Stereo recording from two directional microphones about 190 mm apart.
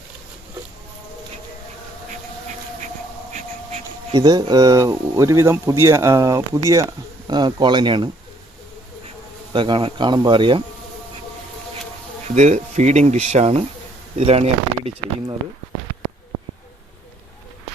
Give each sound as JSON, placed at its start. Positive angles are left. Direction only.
{"t": 3.3, "sound": "a sound", "side_deg": -35}
{"t": 4.1, "sound": "speech", "side_deg": -20}
{"t": 7.3, "sound": "insect", "side_deg": -20}
{"t": 9.5, "sound": "insect", "side_deg": -25}
{"t": 12.3, "sound": "speech", "side_deg": -40}